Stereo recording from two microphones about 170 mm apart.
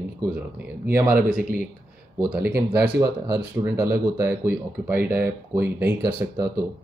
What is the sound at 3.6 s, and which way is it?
Speech, 15° right (ahead or behind).